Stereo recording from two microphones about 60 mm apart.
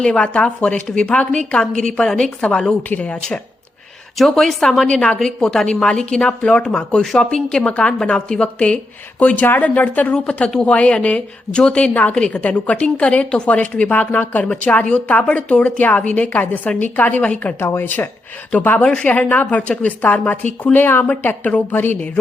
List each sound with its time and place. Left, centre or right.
0.0 s a woman's voice: centre
4.2 s a woman's voice: centre; by 18.1 s left
18.8 s a woman's voice: centre
19.0 s a woman's voice: left